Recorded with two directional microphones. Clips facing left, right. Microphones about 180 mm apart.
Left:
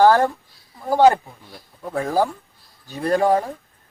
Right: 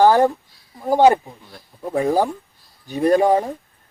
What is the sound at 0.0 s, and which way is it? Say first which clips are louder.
Speech: right 1 dB; 15° right (ahead or behind).